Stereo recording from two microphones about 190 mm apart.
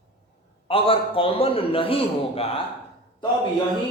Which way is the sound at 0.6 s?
30° left (ahead or behind).